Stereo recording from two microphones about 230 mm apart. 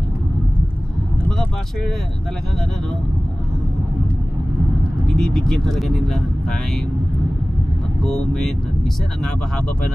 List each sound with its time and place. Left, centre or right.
5.0 s speech: centre